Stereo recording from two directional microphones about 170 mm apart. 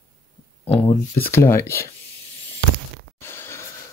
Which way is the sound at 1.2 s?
15° left (ahead or behind).